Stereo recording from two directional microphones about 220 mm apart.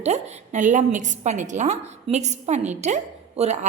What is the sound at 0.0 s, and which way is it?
A woman's voice, 30° right (ahead or behind).